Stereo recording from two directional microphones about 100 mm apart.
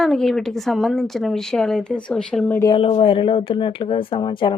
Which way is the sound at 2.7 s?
70° left (ahead or behind).